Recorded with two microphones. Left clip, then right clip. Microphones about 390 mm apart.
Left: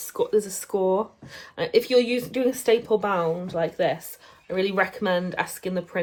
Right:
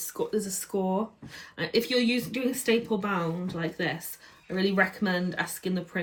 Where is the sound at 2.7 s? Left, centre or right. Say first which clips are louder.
Left 5 dB; centre.